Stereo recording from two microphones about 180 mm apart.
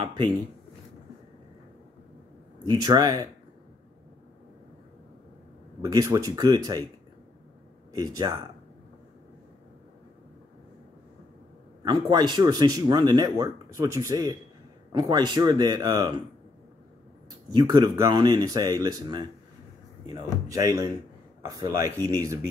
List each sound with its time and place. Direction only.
0.0 s speech: 25° right (ahead or behind)
2.6 s speech: 25° right (ahead or behind)
5.9 s speech: 20° right (ahead or behind)
7.9 s speech: 20° right (ahead or behind)
11.8 s speech: 25° right (ahead or behind)
17.5 s speech: 25° right (ahead or behind)
20.4 s speech: 20° right (ahead or behind)